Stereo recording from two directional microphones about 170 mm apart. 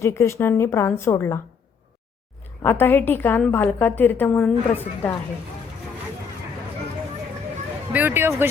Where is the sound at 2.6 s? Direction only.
15° left (ahead or behind).